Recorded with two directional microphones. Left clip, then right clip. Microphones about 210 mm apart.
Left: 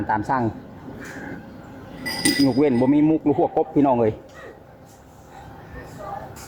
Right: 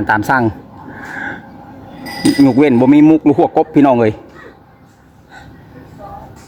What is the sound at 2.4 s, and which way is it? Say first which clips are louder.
A man's voice: right 9 dB; 50° right (ahead or behind).